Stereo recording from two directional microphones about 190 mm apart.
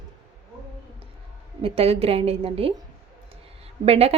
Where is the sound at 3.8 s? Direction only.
30° right (ahead or behind).